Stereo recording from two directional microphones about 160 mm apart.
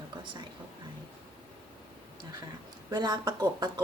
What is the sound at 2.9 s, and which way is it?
Speech, 25° right (ahead or behind).